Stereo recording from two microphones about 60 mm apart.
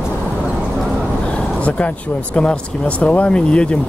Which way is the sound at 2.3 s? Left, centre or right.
Centre.